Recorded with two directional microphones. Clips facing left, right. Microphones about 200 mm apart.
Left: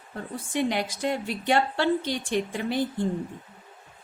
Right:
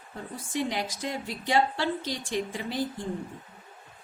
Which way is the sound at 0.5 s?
60° left (ahead or behind).